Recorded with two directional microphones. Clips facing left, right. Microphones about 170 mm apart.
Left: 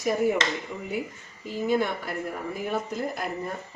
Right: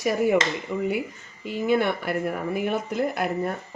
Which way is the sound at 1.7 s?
70° right (ahead or behind).